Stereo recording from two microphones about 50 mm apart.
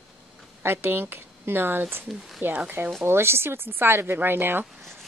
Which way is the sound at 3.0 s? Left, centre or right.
Right.